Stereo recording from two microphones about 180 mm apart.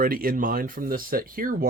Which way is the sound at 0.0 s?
55° right (ahead or behind).